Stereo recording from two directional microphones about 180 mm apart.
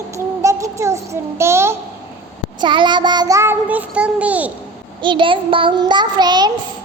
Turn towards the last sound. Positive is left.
turn(degrees=-25)  # may be behind; listen again after turning